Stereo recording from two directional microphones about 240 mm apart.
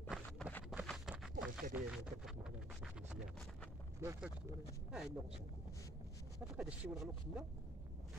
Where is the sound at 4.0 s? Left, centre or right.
Centre.